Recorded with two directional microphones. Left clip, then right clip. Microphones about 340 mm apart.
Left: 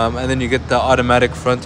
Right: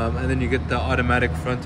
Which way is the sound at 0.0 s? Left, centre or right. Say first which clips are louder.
Left 7 dB; centre.